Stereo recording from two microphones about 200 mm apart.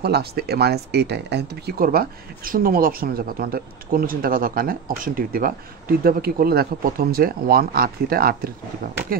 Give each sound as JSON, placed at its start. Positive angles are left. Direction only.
{"t": 0.0, "sound": "speech", "side_deg": -50}